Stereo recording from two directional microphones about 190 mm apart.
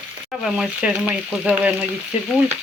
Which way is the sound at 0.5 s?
5° right (ahead or behind).